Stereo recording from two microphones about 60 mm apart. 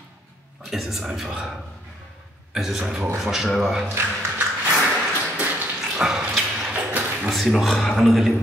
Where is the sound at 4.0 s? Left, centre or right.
Right.